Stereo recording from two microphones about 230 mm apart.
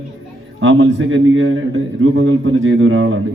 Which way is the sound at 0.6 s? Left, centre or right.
Right.